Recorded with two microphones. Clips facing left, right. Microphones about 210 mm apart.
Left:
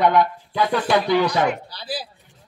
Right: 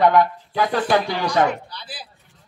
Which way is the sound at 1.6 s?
35° left (ahead or behind).